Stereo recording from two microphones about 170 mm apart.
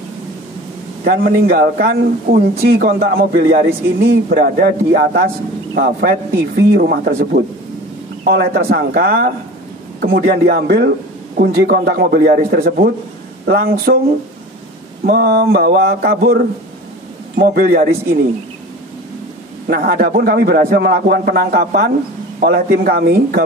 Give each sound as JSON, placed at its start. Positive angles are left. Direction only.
{"t": 1.0, "sound": "a man's voice", "side_deg": -65}
{"t": 15.0, "sound": "speech", "side_deg": -65}
{"t": 19.7, "sound": "speech", "side_deg": -65}